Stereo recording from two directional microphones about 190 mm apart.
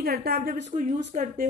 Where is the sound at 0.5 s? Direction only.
45° right (ahead or behind).